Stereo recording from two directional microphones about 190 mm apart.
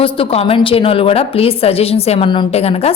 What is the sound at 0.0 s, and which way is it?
A woman's voice, 30° left (ahead or behind).